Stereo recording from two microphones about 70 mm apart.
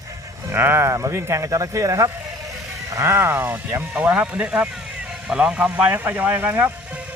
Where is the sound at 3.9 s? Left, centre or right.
Centre.